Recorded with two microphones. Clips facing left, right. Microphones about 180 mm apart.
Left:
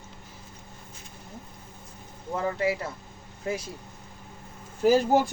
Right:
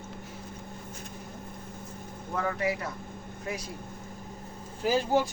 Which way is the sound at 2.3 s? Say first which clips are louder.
Left 3 dB; 25° left (ahead or behind).